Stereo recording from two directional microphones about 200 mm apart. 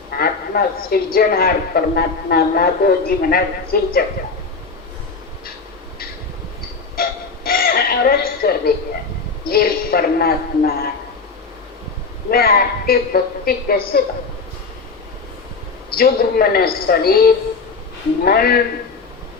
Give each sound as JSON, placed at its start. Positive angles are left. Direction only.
{"t": 0.1, "sound": "a man's voice", "side_deg": 50}
{"t": 6.9, "sound": "a sound", "side_deg": 50}
{"t": 9.5, "sound": "a man's voice", "side_deg": 50}
{"t": 12.3, "sound": "a man's voice", "side_deg": 50}
{"t": 16.0, "sound": "a man's voice", "side_deg": 50}